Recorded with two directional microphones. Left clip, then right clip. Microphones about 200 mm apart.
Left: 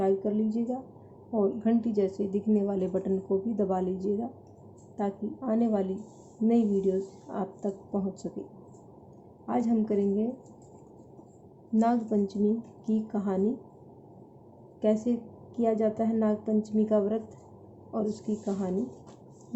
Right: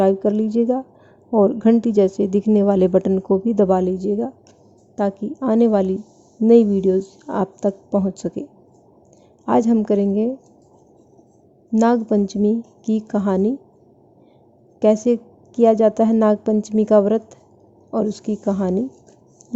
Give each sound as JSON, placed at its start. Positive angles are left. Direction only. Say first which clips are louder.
{"t": 0.0, "sound": "a woman's voice", "louder": "right 10 dB", "side_deg": -50}
{"t": 9.5, "sound": "a woman's voice", "louder": "right 12 dB", "side_deg": -50}
{"t": 11.7, "sound": "a woman's voice", "louder": "right 10 dB", "side_deg": -50}
{"t": 14.8, "sound": "a woman's voice", "louder": "right 12 dB", "side_deg": -50}